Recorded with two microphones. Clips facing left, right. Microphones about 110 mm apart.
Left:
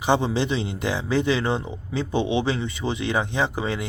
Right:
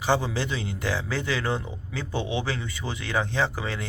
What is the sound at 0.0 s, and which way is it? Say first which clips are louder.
A man's voice: left 4 dB; 20° left (ahead or behind).